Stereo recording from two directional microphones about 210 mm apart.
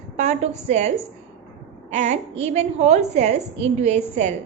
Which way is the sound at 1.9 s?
30° right (ahead or behind).